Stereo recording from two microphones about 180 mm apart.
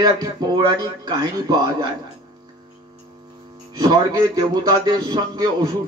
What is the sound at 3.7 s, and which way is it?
A man's voice, 20° right (ahead or behind).